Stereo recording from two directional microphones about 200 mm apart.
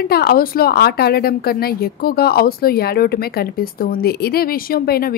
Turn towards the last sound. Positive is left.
turn(degrees=50)  # may be behind; listen again after turning